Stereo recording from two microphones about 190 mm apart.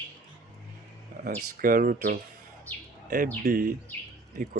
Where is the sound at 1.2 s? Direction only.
50° right (ahead or behind).